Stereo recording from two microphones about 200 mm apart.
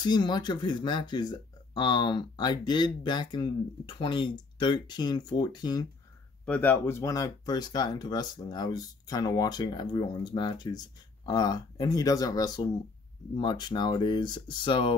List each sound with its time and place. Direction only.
0.0 s speech: 20° left (ahead or behind)
6.4 s speech: 5° left (ahead or behind); by 15.0 s 25° left (ahead or behind)